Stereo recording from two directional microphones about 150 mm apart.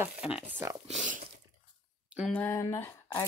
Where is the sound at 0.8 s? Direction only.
60° right (ahead or behind).